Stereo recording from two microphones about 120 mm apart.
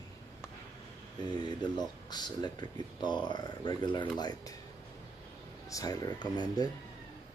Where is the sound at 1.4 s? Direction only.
35° left (ahead or behind).